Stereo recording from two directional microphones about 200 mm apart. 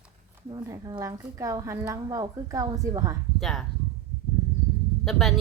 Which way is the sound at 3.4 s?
Centre (ahead or behind).